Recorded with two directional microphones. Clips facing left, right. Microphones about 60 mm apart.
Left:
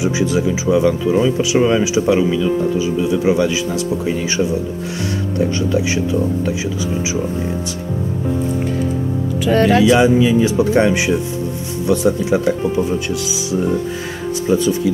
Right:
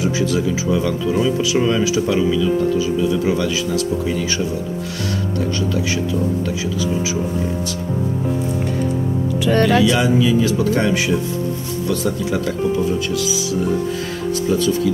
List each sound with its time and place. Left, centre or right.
0.0 s speech: centre
9.4 s speech: centre
9.9 s speech: left